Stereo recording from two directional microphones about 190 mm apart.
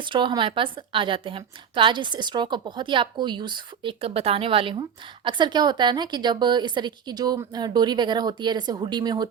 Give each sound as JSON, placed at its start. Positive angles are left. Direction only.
{"t": 0.0, "sound": "a woman's voice", "side_deg": -25}